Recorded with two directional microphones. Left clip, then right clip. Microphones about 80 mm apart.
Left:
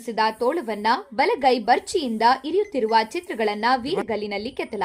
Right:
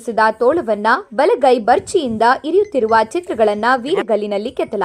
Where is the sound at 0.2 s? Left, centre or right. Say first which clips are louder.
Right 8 dB; right.